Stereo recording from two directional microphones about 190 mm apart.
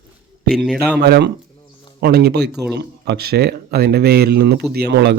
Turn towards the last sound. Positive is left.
turn(degrees=-60)  # may be behind; listen again after turning